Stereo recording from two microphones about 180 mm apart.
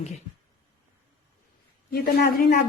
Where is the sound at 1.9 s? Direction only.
60° left (ahead or behind).